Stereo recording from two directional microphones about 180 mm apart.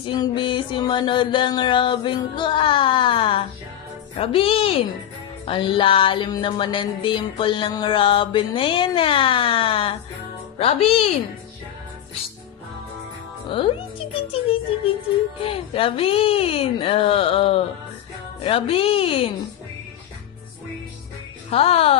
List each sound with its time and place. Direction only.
0.0 s music: 25° left (ahead or behind)
4.2 s speech: 30° left (ahead or behind)
5.4 s music: 30° left (ahead or behind)
10.6 s speech: 35° left (ahead or behind)
13.5 s speech: 30° left (ahead or behind)
21.5 s speech: 35° left (ahead or behind)